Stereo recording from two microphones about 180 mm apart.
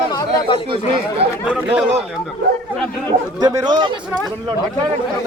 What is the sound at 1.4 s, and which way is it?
Speech, 5° right (ahead or behind).